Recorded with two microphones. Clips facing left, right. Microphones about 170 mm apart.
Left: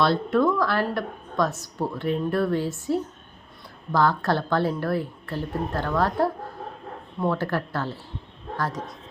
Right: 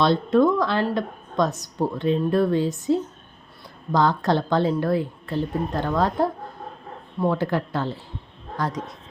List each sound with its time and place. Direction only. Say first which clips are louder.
0.0 s a woman's voice: right 3 dB; 20° right (ahead or behind)